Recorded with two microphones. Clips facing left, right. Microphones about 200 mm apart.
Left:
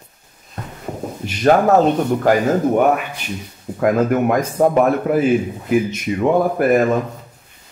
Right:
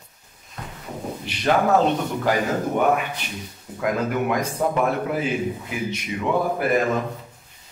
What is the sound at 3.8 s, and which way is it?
A man's voice, 50° left (ahead or behind).